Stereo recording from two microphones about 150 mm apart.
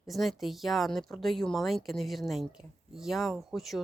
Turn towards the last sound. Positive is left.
turn(degrees=0)  # may be behind; listen again after turning